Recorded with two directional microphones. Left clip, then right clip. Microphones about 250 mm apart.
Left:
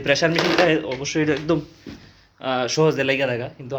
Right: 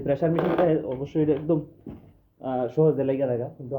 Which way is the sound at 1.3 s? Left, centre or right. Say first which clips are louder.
Left 2 dB; left.